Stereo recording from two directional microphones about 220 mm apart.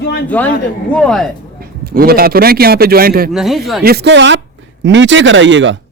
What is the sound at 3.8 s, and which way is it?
Speech, 45° right (ahead or behind).